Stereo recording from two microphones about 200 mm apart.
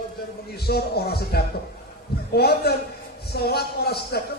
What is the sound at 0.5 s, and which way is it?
A man's voice, 50° left (ahead or behind).